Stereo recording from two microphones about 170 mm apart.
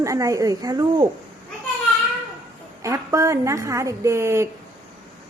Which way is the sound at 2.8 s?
15° right (ahead or behind).